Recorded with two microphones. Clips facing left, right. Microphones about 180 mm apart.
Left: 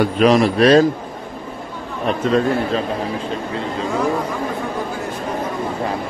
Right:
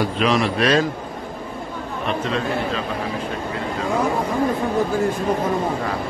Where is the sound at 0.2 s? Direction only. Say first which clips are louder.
Left 7 dB; 40° left (ahead or behind).